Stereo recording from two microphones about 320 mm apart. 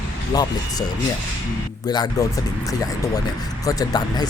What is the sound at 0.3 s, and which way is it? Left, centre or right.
Speech, centre.